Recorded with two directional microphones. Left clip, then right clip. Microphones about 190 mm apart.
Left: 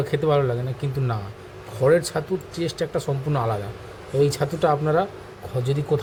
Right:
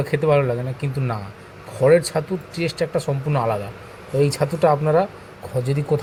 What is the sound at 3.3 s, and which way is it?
A man's voice, 10° right (ahead or behind).